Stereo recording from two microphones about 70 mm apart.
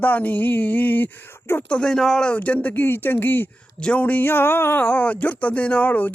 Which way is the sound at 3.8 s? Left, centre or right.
Centre.